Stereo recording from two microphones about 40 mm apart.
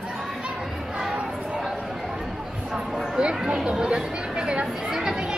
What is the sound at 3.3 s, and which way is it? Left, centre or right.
Chatter, centre.